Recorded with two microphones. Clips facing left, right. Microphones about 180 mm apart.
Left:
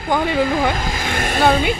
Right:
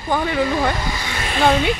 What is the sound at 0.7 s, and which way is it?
Speech, 90° left.